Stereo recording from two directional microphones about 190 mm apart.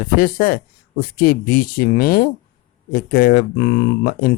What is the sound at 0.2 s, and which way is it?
Speech, 50° left (ahead or behind).